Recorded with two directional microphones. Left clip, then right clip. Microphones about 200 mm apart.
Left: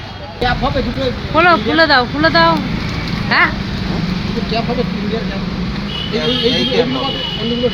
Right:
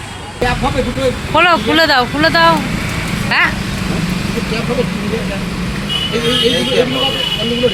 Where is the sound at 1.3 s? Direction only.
5° left (ahead or behind).